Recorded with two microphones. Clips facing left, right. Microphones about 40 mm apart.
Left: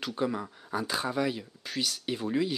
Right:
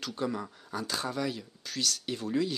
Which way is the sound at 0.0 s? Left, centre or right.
Centre.